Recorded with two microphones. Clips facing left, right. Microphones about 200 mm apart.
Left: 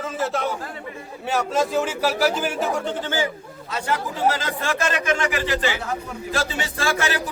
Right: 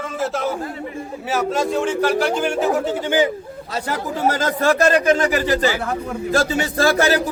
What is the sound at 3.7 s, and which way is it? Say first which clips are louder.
A man's voice: right 1 dB; 40° right (ahead or behind).